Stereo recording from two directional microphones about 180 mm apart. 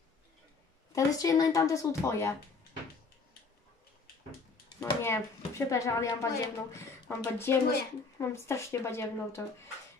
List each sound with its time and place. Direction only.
0.9 s a woman's voice: 20° left (ahead or behind)
5.0 s a woman's voice: 15° left (ahead or behind)